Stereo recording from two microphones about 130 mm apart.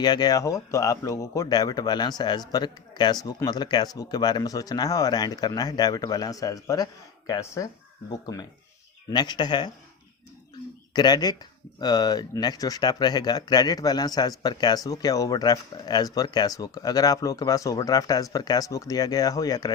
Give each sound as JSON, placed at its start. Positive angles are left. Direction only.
{"t": 0.0, "sound": "speech", "side_deg": 30}
{"t": 10.9, "sound": "speech", "side_deg": 30}